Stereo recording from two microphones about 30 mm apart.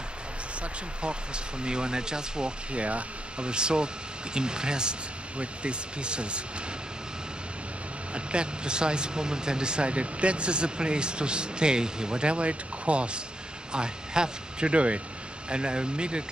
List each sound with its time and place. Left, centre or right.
0.6 s speech: right
2.7 s speech: right
3.4 s speech: right
8.1 s speech: right
13.7 s speech: right
14.7 s speech: right